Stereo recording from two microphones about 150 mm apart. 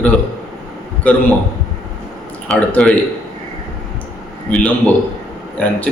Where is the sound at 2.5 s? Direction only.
5° left (ahead or behind).